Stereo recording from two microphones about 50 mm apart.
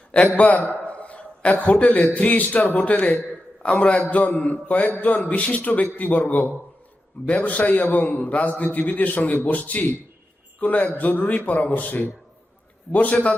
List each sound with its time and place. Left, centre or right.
0.3 s a man's voice: left
0.7 s a sound: left
2.1 s a man's voice: left
10.8 s a man's voice: left